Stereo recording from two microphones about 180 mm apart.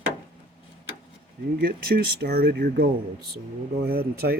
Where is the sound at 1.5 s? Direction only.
65° right (ahead or behind).